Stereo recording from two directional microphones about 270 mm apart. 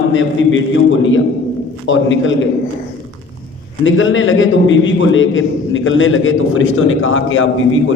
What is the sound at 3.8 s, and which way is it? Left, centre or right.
A man's voice, left.